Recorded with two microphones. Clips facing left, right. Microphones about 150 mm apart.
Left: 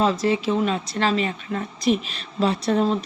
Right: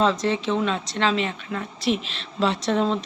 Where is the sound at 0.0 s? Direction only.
10° left (ahead or behind).